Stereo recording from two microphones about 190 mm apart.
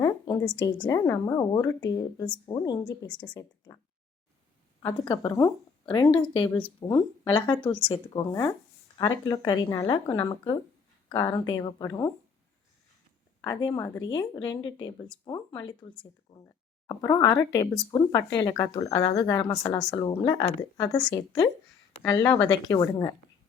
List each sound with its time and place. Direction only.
0.0 s a sound: 15° left (ahead or behind)
0.6 s a woman's voice: 20° left (ahead or behind)
4.8 s a woman's voice: 20° left (ahead or behind)
13.4 s a woman's voice: 20° left (ahead or behind)